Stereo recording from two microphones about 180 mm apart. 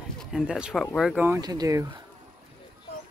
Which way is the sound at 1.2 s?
20° right (ahead or behind).